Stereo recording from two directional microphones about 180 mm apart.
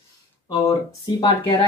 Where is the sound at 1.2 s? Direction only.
30° left (ahead or behind).